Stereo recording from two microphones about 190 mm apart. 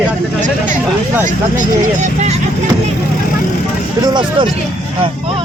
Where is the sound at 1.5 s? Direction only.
40° right (ahead or behind).